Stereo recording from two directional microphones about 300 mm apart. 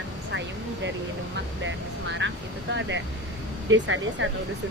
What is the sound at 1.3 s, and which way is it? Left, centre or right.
Speech, right.